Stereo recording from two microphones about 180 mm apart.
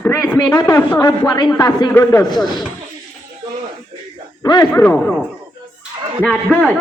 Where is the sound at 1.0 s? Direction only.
25° left (ahead or behind).